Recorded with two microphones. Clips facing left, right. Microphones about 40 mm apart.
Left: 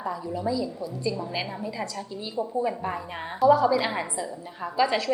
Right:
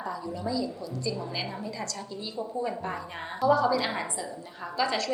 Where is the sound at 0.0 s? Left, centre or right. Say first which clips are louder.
Left 4 dB; centre.